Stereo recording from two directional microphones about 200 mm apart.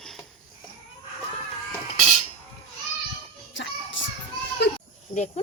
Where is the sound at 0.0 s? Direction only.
Centre (ahead or behind).